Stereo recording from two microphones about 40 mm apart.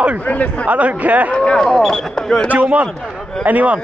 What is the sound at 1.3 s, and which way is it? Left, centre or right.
Speech, left.